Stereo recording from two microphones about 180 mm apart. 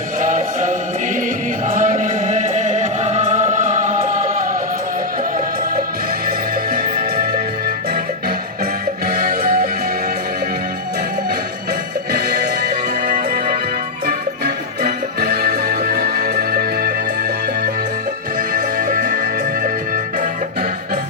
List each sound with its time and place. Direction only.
0.2 s music: 45° right (ahead or behind)
6.2 s music: 55° right (ahead or behind)
9.0 s music: 55° right (ahead or behind)
12.1 s music: 60° right (ahead or behind)